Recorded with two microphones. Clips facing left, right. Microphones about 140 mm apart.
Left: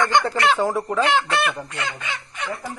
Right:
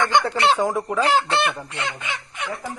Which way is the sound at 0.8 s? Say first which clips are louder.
Left 1 dB; 5° right (ahead or behind).